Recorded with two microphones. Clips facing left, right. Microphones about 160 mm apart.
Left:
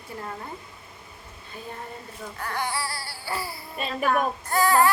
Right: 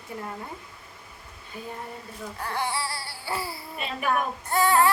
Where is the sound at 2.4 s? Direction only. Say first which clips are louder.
Even; 30° right (ahead or behind).